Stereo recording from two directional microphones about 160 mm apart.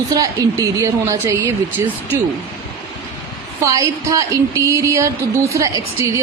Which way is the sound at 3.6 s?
20° right (ahead or behind).